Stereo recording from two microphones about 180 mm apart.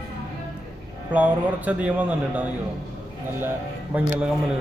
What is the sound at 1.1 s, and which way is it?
A man's voice, 10° right (ahead or behind).